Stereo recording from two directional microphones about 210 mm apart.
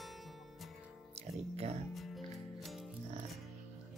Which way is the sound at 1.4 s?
30° right (ahead or behind).